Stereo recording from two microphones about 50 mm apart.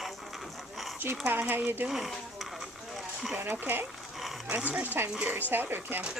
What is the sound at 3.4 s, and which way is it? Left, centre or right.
Speech, right.